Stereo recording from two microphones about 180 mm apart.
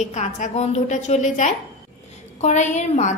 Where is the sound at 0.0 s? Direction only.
40° left (ahead or behind).